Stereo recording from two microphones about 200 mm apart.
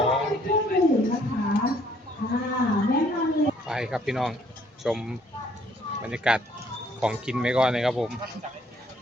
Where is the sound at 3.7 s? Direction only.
5° right (ahead or behind).